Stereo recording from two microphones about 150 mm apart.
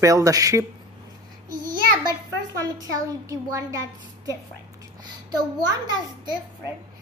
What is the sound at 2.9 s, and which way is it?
Speech, 20° right (ahead or behind).